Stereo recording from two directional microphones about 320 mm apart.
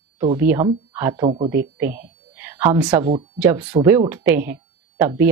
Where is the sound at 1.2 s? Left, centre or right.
Centre.